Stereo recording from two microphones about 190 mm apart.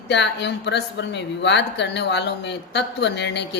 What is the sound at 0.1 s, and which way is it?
A woman's voice, 65° left (ahead or behind).